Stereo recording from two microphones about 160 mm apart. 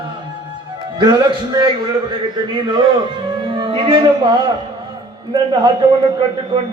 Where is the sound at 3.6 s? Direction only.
30° right (ahead or behind).